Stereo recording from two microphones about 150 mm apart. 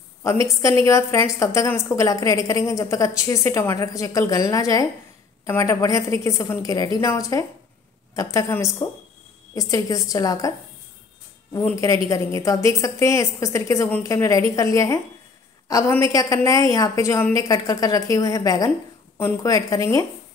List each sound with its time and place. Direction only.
0.6 s a woman's voice: 20° left (ahead or behind)
11.7 s a woman's voice: 20° left (ahead or behind)
16.1 s a woman's voice: 20° left (ahead or behind)